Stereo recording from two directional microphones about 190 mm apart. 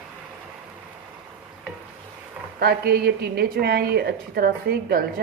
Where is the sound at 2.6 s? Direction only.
55° right (ahead or behind).